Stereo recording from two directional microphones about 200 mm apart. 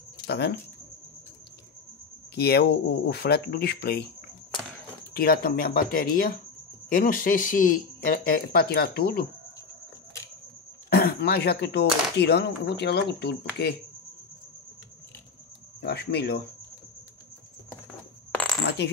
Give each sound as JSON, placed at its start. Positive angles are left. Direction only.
{"t": 0.3, "sound": "speech", "side_deg": 55}
{"t": 2.3, "sound": "speech", "side_deg": 50}
{"t": 5.1, "sound": "speech", "side_deg": 50}
{"t": 10.9, "sound": "speech", "side_deg": 50}
{"t": 15.8, "sound": "speech", "side_deg": 55}
{"t": 18.8, "sound": "speech", "side_deg": 60}